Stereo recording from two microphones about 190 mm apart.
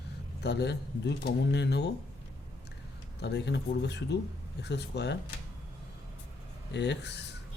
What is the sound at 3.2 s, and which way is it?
Speech, 65° left (ahead or behind).